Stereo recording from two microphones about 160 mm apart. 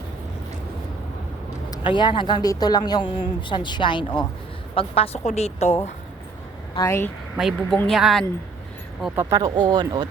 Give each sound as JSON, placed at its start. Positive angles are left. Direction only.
{"t": 1.7, "sound": "a woman's voice", "side_deg": 30}
{"t": 6.7, "sound": "speech", "side_deg": 20}
{"t": 7.3, "sound": "speech", "side_deg": 0}
{"t": 9.1, "sound": "speech", "side_deg": -20}